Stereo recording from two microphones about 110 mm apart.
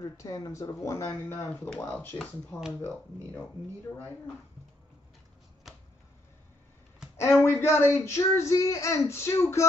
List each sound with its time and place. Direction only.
0.0 s speech: 35° left (ahead or behind)
5.7 s a sound: centre (ahead or behind)
7.2 s speech: 25° left (ahead or behind)